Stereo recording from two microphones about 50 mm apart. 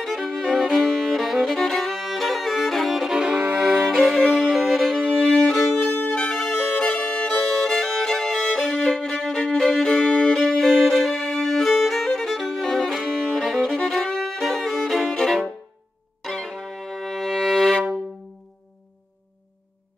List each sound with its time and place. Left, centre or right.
0.0 s music: centre
3.3 s violin: right
3.8 s violin: centre
4.4 s music: centre
5.3 s violin: centre
5.9 s music: left
6.3 s music: centre
6.8 s violin: left
7.4 s violin: centre
8.8 s violin: centre
16.2 s music: centre